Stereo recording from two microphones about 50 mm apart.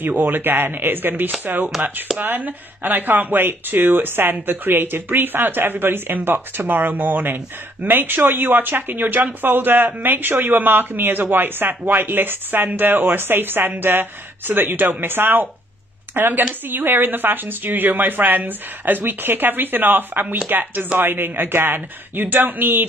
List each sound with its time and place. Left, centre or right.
0.0 s a woman's voice: right